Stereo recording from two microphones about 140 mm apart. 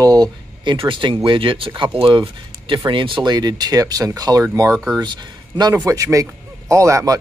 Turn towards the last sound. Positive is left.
turn(degrees=-25)  # may be behind; listen again after turning